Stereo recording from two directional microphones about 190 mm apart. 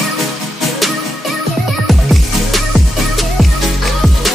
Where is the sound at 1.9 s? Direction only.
Centre (ahead or behind).